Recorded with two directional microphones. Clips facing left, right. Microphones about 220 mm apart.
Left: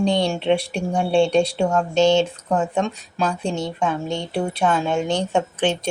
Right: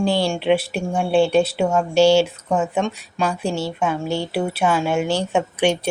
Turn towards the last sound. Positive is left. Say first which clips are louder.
# right 2 dB
turn(degrees=-10)  # may be behind; listen again after turning